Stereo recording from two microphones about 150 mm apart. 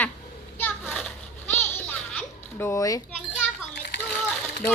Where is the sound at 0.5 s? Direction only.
15° left (ahead or behind).